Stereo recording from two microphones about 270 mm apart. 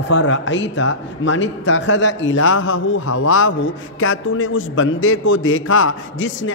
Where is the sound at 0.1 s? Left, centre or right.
Left.